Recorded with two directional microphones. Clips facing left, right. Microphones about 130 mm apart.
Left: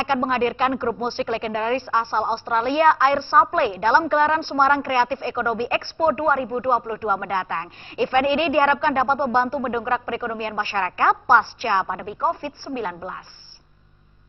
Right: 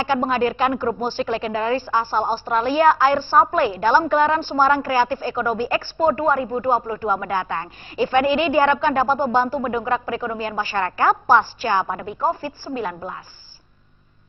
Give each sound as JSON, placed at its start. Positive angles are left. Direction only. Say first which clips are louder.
{"t": 0.3, "sound": "a woman's voice", "louder": "right 1 dB", "side_deg": -20}
{"t": 12.7, "sound": "a woman's voice", "louder": "right 1 dB", "side_deg": -40}